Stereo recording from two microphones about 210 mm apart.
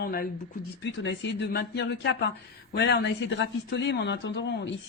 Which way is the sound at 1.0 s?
55° left (ahead or behind).